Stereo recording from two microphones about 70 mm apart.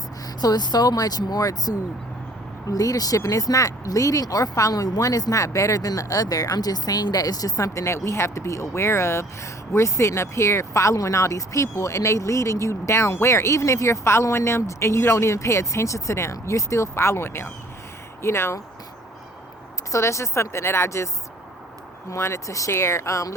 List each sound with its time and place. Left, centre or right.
0.4 s speech: left
19.9 s speech: left
22.1 s speech: left